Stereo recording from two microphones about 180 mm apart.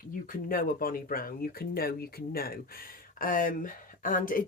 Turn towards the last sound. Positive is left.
turn(degrees=50)  # may be behind; listen again after turning